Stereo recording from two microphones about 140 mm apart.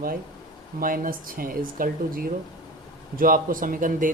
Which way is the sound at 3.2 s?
75° right (ahead or behind).